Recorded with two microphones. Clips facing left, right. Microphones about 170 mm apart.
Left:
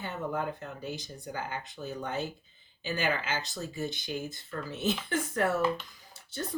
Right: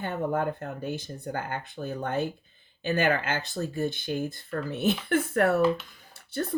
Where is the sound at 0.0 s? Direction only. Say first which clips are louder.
Right 6 dB; 55° right (ahead or behind).